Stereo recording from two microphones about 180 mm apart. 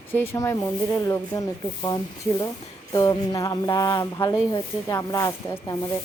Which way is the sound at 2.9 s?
20° left (ahead or behind).